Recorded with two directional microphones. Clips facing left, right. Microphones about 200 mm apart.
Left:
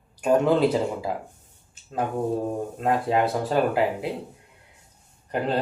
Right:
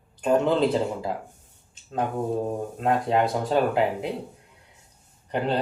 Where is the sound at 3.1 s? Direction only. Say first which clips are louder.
Even; 5° left (ahead or behind).